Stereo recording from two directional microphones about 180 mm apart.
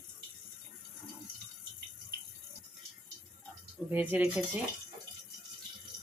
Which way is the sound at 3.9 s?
10° right (ahead or behind).